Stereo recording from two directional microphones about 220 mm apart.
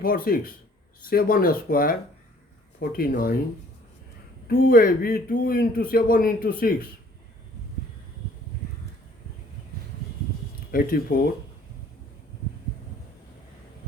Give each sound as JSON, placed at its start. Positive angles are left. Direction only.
{"t": 0.0, "sound": "a man's voice", "side_deg": 40}
{"t": 4.4, "sound": "a man's voice", "side_deg": 40}
{"t": 10.7, "sound": "a man's voice", "side_deg": 40}